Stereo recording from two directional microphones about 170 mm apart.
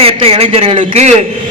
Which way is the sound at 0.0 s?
35° right (ahead or behind).